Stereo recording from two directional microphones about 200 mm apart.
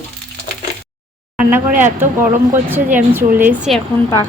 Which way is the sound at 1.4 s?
10° right (ahead or behind).